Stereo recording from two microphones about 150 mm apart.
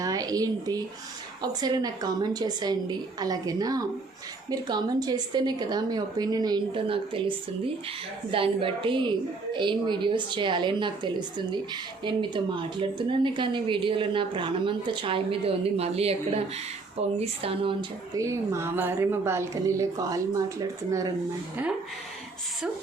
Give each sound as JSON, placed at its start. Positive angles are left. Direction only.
{"t": 0.0, "sound": "a woman's voice", "side_deg": -25}
{"t": 18.1, "sound": "a woman's voice", "side_deg": -20}